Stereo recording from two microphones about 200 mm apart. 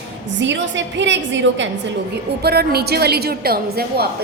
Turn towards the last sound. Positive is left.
turn(degrees=-50)  # may be behind; listen again after turning